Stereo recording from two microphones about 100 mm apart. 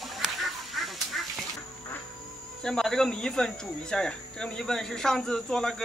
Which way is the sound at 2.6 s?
5° left (ahead or behind).